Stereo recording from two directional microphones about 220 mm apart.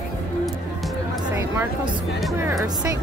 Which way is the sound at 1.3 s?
10° right (ahead or behind).